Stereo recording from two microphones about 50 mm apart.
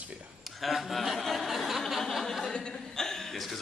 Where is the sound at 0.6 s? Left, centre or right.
Centre.